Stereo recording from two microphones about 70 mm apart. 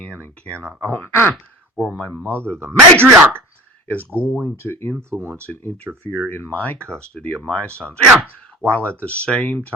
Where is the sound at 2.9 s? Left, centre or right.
Right.